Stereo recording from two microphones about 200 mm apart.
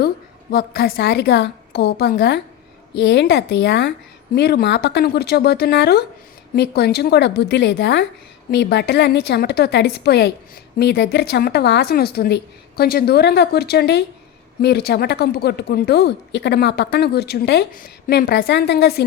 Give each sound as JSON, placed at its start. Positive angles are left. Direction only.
{"t": 0.5, "sound": "a woman's voice", "side_deg": 50}